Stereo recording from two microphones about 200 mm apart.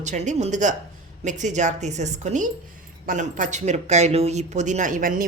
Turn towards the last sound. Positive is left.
turn(degrees=-45)  # may be behind; listen again after turning